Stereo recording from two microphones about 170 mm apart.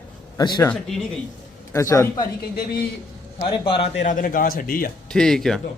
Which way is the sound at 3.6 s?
35° left (ahead or behind).